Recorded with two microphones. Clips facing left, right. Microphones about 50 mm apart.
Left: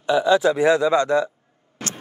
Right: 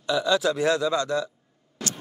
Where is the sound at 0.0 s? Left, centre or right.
Left.